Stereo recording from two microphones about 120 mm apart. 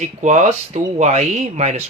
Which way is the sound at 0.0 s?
80° right.